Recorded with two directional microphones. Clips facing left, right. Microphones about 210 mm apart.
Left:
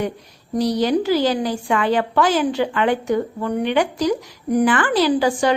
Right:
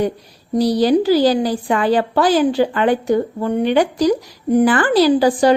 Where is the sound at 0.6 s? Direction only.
35° right (ahead or behind).